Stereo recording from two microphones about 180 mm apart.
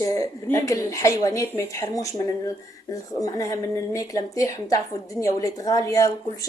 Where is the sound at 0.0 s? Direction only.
15° left (ahead or behind).